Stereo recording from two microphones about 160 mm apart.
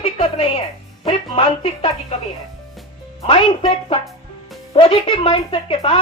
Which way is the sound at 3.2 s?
35° left (ahead or behind).